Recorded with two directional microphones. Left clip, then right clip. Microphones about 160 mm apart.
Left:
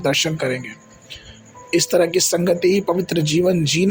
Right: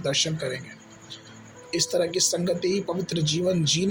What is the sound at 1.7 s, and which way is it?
Speech, 50° left (ahead or behind).